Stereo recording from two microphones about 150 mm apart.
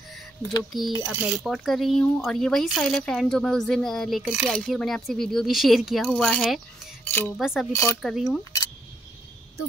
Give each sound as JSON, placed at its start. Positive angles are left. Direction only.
{"t": 0.7, "sound": "speech", "side_deg": 0}
{"t": 7.1, "sound": "cutlery", "side_deg": 15}
{"t": 7.3, "sound": "speech", "side_deg": 0}
{"t": 7.7, "sound": "speech", "side_deg": 20}
{"t": 8.0, "sound": "speech", "side_deg": 0}